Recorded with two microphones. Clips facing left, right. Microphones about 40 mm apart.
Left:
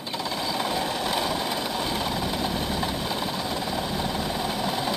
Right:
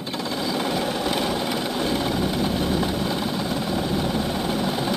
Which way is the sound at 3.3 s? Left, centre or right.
Centre.